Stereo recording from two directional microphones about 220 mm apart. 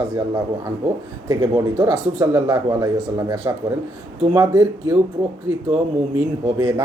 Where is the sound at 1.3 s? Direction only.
15° right (ahead or behind).